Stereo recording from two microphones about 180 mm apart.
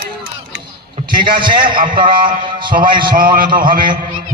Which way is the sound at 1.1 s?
55° right (ahead or behind).